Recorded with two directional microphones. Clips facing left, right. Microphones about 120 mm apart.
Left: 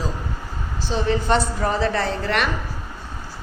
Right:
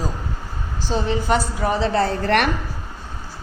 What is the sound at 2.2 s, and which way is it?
Speech, 55° right (ahead or behind).